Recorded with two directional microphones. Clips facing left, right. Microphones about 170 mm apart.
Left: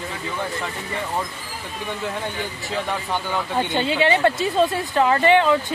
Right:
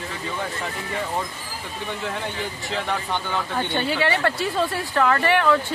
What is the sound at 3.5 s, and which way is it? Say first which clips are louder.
Speech: left 3 dB; 20° left (ahead or behind).